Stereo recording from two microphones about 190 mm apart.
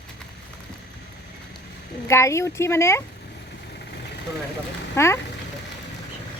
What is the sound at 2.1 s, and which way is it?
Speech, 15° left (ahead or behind).